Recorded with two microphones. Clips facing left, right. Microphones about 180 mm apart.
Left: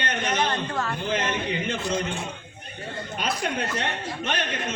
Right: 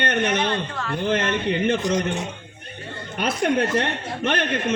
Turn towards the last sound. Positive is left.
turn(degrees=-55)  # may be behind; listen again after turning